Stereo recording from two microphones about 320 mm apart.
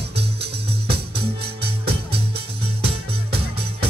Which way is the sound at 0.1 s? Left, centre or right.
Right.